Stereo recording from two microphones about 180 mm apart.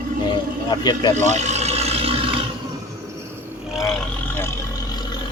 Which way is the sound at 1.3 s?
40° right (ahead or behind).